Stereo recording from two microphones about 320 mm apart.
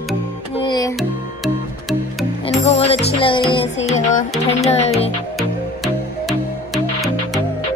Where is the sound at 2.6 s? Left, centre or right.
Centre.